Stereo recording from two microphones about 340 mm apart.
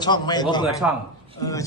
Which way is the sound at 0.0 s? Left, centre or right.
Centre.